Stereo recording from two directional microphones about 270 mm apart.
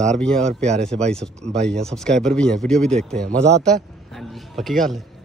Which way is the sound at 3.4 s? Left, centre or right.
Right.